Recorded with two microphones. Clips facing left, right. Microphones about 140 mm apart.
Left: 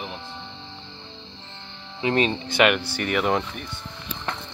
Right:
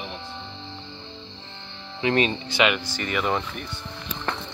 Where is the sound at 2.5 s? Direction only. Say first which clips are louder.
Left 3 dB; 55° left (ahead or behind).